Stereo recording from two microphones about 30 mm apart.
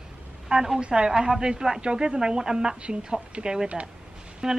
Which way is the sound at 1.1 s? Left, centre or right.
Centre.